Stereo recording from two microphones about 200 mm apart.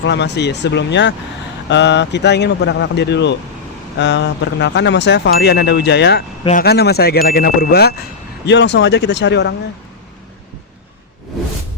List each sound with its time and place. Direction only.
0.0 s speech: 60° left (ahead or behind)